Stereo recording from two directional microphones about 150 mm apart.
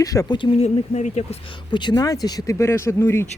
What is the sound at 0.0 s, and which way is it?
Speech, 25° left (ahead or behind).